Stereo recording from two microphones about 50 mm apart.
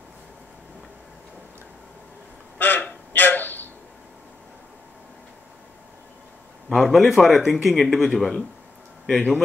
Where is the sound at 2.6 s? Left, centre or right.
Left.